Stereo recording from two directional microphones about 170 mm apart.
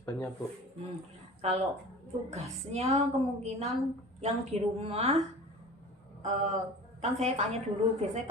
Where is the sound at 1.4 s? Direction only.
40° right (ahead or behind).